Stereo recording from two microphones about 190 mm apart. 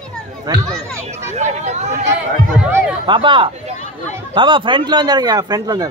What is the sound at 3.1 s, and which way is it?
A man's voice, 25° right (ahead or behind).